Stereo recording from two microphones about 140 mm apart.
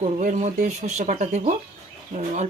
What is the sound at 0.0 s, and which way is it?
Speech, 55° right (ahead or behind).